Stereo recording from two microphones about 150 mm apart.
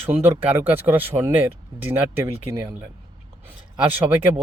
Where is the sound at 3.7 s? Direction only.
10° right (ahead or behind).